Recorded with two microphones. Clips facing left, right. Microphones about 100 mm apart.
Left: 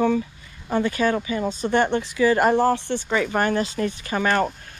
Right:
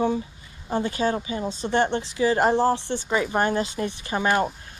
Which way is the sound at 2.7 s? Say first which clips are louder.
Left 1 dB; 15° right (ahead or behind).